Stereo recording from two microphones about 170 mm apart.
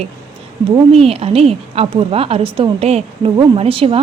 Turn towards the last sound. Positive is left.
turn(degrees=-35)  # may be behind; listen again after turning